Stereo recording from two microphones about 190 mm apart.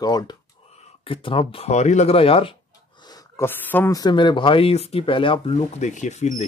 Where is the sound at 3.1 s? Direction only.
10° left (ahead or behind).